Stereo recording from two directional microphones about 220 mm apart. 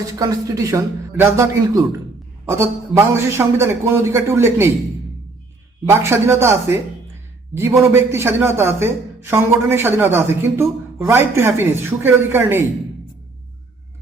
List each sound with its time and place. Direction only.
0.1 s a man's voice: 15° right (ahead or behind)
5.9 s a man's voice: 10° right (ahead or behind)